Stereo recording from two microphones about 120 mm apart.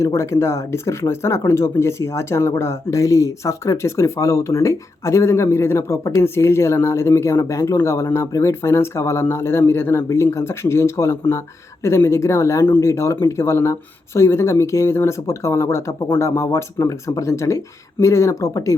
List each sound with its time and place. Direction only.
0.0 s speech: 25° left (ahead or behind)